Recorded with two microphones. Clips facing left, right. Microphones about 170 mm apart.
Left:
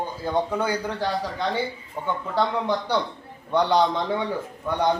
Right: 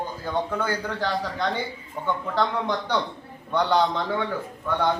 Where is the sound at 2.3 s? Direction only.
10° left (ahead or behind).